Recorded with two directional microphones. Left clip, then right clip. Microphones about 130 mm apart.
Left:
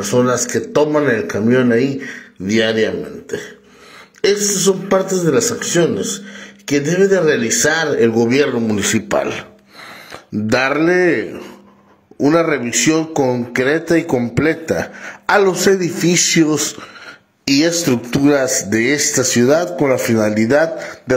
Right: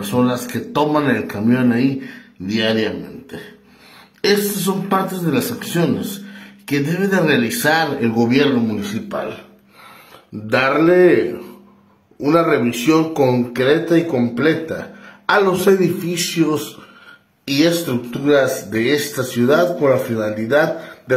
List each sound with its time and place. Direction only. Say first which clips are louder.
0.0 s a man's voice: left 4 dB; 15° left (ahead or behind)
2.4 s a man's voice: left 3 dB; 30° left (ahead or behind)
10.5 s speech: even; 50° left (ahead or behind)
12.3 s a man's voice: even; 45° left (ahead or behind)
13.5 s speech: even; 50° left (ahead or behind)
15.2 s a man's voice: left 1 dB; 45° left (ahead or behind)
18.2 s speech: right 1 dB; 55° left (ahead or behind)